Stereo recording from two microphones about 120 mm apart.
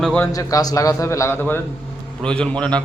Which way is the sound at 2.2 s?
10° left (ahead or behind).